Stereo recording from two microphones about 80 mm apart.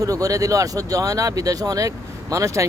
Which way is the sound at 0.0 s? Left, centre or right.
Right.